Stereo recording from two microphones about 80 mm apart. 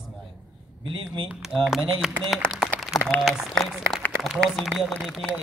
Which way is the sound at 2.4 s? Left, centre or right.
Centre.